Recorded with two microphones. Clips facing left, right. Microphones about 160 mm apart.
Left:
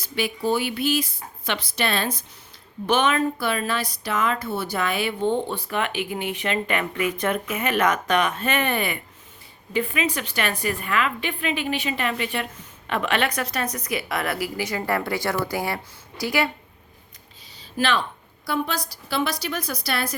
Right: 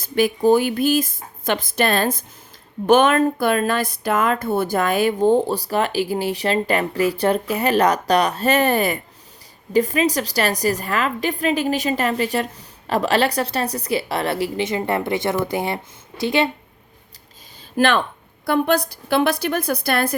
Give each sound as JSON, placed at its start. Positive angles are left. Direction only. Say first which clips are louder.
{"t": 0.0, "sound": "a woman's voice", "louder": "right 8 dB", "side_deg": -45}
{"t": 17.7, "sound": "a woman's voice", "louder": "right 6 dB", "side_deg": -55}